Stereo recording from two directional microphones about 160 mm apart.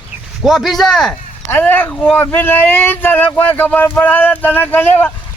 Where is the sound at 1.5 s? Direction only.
10° left (ahead or behind).